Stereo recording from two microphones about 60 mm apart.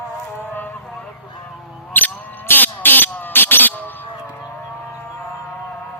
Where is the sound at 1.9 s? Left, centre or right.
Left.